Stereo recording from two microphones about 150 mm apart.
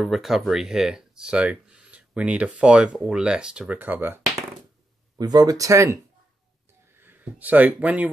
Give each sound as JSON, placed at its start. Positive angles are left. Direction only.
{"t": 0.0, "sound": "speech", "side_deg": 0}
{"t": 5.1, "sound": "speech", "side_deg": -25}
{"t": 7.0, "sound": "speech", "side_deg": -15}